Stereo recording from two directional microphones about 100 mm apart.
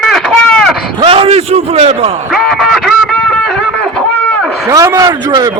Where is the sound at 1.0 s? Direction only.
70° right (ahead or behind).